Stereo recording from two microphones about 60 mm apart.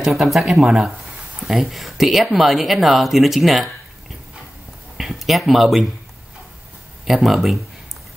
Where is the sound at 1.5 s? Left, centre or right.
Centre.